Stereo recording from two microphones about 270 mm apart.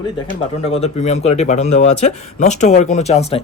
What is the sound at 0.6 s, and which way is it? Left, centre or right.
Speech, left.